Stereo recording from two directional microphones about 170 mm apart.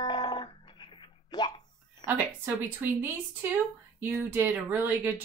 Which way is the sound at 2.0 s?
25° left (ahead or behind).